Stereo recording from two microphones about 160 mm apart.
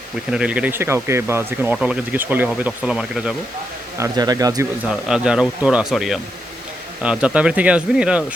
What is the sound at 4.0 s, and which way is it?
Speech, 25° right (ahead or behind).